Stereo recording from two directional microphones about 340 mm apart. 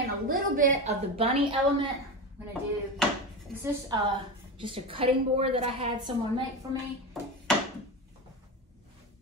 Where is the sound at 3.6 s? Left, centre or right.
Centre.